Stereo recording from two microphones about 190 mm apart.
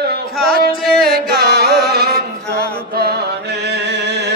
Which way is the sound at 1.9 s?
55° right (ahead or behind).